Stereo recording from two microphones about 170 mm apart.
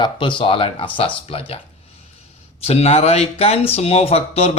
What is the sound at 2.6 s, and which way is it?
Speech, 35° left (ahead or behind).